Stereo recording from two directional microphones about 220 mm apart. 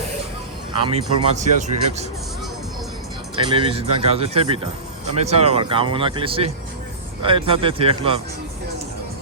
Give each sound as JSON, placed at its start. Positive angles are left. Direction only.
{"t": 0.9, "sound": "speech", "side_deg": -30}
{"t": 3.3, "sound": "speech", "side_deg": -25}